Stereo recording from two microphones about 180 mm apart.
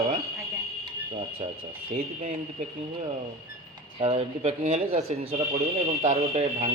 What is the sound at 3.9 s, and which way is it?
Speech, 35° right (ahead or behind).